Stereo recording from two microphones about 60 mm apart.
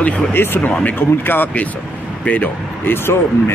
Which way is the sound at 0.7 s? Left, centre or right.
Centre.